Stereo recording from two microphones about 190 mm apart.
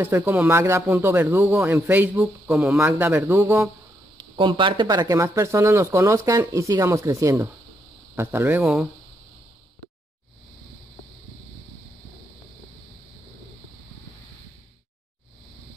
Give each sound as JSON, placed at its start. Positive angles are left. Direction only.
{"t": 0.0, "sound": "speech", "side_deg": -10}
{"t": 2.9, "sound": "speech", "side_deg": -10}
{"t": 4.4, "sound": "speech", "side_deg": -25}